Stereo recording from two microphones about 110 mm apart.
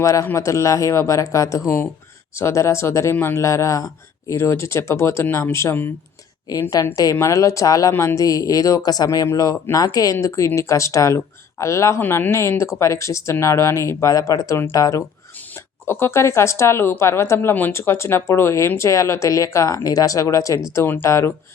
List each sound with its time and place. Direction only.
0.0 s speech: 30° left (ahead or behind)